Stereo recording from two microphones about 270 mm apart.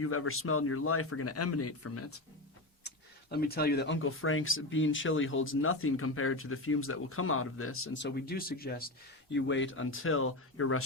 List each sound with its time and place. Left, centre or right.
0.0 s speech: left
2.8 s speech: left